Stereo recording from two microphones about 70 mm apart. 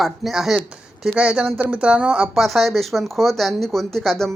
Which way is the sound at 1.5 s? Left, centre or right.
Right.